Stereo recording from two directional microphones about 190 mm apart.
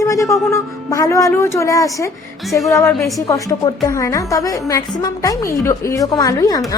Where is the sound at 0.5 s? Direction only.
15° left (ahead or behind).